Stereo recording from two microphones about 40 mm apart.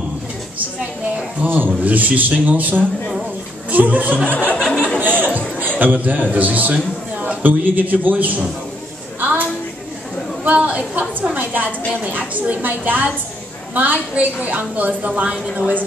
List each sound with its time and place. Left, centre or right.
1.4 s a woman's voice: right
1.8 s a woman's voice: right
5.0 s chatter: right
5.8 s a woman's voice: right
6.7 s a sound: right
7.4 s a woman's voice: right
9.2 s a sound: right
10.4 s a woman's voice: right
11.3 s a woman's voice: right
15.0 s a woman's voice: right